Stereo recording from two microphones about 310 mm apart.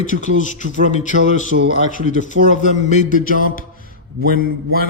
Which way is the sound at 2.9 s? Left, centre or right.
Left.